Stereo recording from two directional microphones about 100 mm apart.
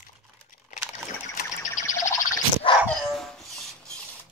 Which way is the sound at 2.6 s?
60° left (ahead or behind).